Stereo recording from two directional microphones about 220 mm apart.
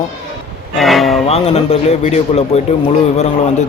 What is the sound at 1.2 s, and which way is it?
Speech, 30° left (ahead or behind).